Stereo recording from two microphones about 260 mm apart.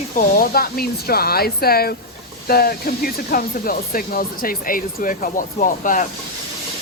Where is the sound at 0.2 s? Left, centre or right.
Left.